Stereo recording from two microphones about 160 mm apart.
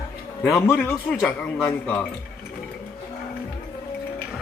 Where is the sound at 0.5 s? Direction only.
15° left (ahead or behind).